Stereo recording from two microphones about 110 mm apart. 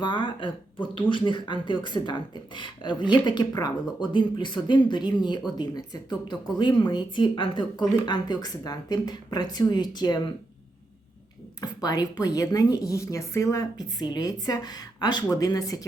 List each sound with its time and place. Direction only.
0.0 s speech: 45° left (ahead or behind)
11.6 s speech: 35° left (ahead or behind)